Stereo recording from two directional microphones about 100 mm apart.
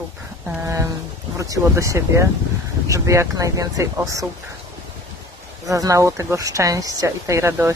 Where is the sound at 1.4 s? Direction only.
30° right (ahead or behind).